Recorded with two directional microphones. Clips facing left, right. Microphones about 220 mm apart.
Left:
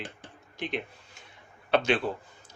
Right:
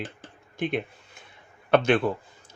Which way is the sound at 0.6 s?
55° right (ahead or behind).